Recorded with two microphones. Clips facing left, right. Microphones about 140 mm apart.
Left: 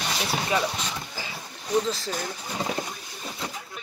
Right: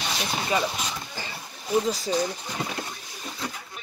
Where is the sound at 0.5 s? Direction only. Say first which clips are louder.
Even; centre (ahead or behind).